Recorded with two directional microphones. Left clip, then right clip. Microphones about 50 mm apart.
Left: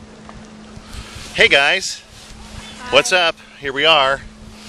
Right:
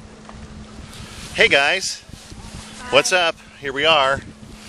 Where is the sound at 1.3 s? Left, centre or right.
Centre.